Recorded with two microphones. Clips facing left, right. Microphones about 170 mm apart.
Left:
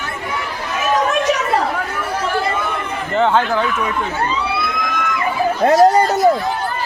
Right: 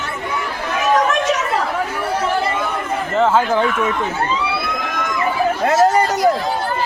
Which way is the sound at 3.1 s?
5° right (ahead or behind).